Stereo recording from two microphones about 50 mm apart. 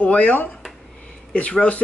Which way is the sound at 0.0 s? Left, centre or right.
Left.